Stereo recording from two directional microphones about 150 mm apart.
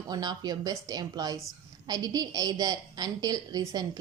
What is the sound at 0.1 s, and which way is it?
A woman's voice, 25° right (ahead or behind).